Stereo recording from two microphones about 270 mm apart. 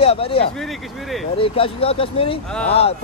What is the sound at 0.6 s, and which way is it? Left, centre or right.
Speech, centre.